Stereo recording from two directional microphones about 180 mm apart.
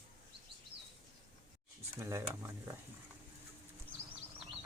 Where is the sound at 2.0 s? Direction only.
15° right (ahead or behind).